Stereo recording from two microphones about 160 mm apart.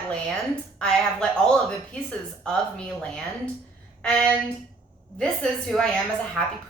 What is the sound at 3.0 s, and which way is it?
A woman's voice, 5° left (ahead or behind).